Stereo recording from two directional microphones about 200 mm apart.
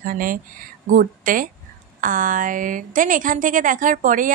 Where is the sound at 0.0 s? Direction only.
45° right (ahead or behind).